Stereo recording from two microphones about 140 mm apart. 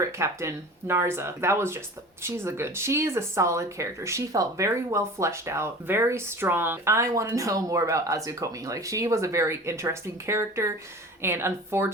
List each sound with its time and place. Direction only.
0.2 s a woman's voice: 20° right (ahead or behind)